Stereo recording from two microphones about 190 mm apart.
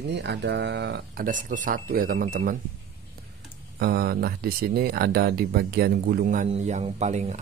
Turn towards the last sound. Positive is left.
turn(degrees=-35)  # may be behind; listen again after turning